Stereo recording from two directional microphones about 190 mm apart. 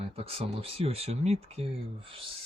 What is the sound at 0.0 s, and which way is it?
Speech, 30° right (ahead or behind).